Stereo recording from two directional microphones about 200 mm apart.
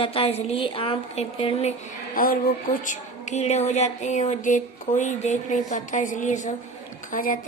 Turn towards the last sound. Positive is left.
turn(degrees=45)  # may be behind; listen again after turning